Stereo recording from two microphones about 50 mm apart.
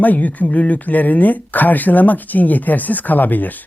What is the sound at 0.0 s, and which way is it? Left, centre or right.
Speech, left.